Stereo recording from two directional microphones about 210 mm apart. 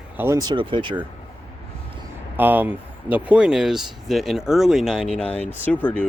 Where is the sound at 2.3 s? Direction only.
10° right (ahead or behind).